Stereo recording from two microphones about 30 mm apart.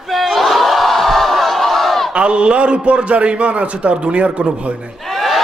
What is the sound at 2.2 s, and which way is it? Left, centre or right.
A man's voice, right.